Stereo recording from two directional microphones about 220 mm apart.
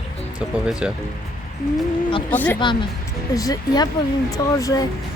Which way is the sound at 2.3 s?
5° left (ahead or behind).